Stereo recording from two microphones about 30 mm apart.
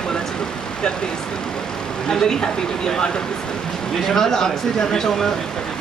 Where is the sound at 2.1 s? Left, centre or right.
Centre.